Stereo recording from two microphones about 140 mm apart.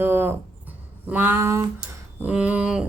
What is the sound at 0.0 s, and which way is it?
A woman's voice, 15° right (ahead or behind).